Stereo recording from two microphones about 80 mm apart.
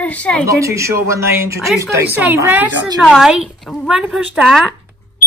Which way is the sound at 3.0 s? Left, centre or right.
Centre.